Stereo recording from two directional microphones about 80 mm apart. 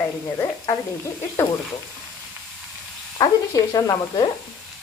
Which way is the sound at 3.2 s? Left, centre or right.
Left.